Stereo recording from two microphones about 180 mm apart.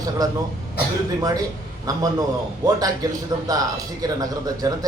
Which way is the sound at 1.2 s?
20° right (ahead or behind).